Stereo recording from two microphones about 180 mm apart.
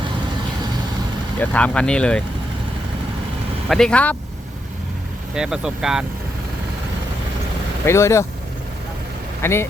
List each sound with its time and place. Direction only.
1.4 s speech: 5° left (ahead or behind)
3.7 s speech: 5° left (ahead or behind)
5.3 s speech: 5° right (ahead or behind)
7.9 s speech: 15° left (ahead or behind)
9.4 s speech: 15° left (ahead or behind)